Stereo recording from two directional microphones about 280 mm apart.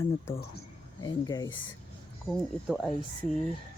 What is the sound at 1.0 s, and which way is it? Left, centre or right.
Speech, centre.